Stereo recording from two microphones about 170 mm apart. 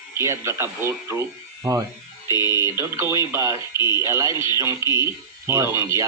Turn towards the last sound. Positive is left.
turn(degrees=-15)  # may be behind; listen again after turning